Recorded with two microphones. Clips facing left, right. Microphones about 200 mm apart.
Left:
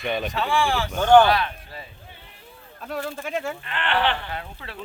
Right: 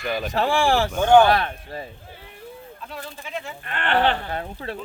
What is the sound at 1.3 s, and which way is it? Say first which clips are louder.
Speech: right 2 dB; 50° right (ahead or behind).